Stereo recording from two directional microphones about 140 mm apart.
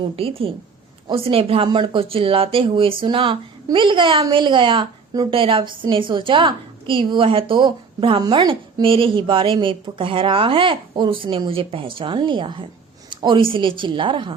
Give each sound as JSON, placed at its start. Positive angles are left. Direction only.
{"t": 0.2, "sound": "a woman's voice", "side_deg": -40}